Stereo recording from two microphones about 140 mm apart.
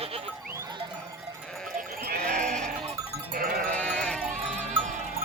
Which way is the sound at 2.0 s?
90° right.